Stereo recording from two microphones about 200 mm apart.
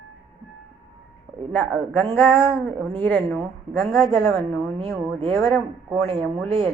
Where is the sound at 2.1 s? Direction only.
10° left (ahead or behind).